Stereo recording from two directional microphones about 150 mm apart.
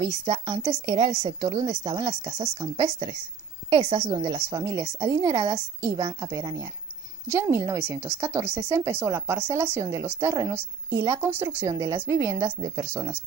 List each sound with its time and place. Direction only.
0.2 s speech: 40° right (ahead or behind); by 13.2 s 20° right (ahead or behind)